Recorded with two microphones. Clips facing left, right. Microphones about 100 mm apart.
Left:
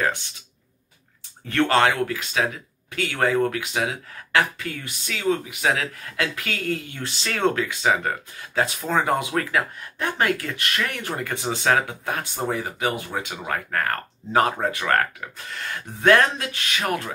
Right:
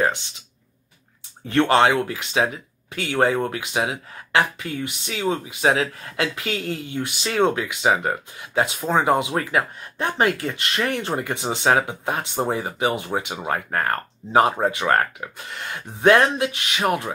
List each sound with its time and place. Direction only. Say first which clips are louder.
1.5 s speech: right 3 dB; 20° right (ahead or behind)